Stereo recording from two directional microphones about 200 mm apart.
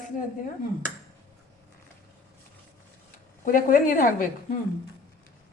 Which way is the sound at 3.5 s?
45° left (ahead or behind).